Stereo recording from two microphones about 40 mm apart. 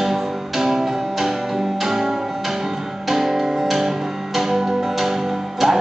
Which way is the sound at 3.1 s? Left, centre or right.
Centre.